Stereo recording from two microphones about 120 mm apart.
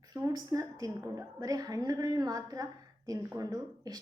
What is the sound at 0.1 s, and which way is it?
A woman's voice, 30° right (ahead or behind).